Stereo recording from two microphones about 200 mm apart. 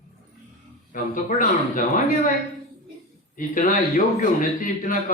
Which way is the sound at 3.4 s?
45° left (ahead or behind).